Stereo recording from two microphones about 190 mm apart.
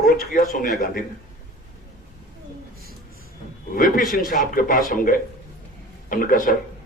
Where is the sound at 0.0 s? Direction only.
50° left (ahead or behind).